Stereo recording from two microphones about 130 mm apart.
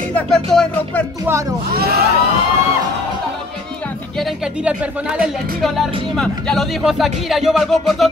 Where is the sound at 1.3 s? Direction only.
15° right (ahead or behind).